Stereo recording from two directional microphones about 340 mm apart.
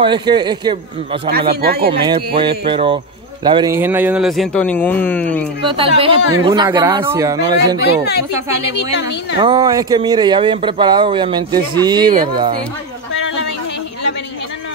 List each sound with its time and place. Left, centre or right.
0.0 s speech: centre
1.5 s speech: right
1.9 s speech: centre
5.7 s speech: centre
8.9 s a woman's voice: left
9.4 s speech: centre